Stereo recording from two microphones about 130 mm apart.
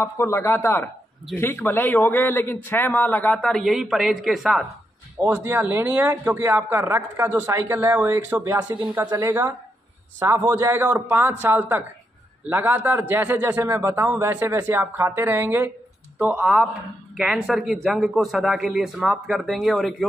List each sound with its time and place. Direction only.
0.0 s a man's voice: 20° left (ahead or behind); by 4.6 s centre (ahead or behind)
5.2 s a man's voice: 15° right (ahead or behind); by 20.1 s centre (ahead or behind)